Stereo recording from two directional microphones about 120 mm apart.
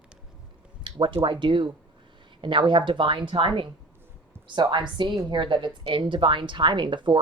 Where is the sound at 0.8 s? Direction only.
40° right (ahead or behind).